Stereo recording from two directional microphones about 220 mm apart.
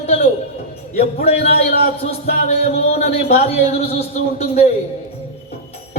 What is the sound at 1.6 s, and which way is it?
A man's voice, 30° left (ahead or behind).